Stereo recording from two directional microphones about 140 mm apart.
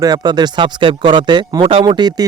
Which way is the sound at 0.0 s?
30° right (ahead or behind).